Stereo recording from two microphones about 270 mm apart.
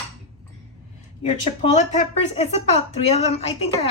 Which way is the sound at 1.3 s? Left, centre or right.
Left.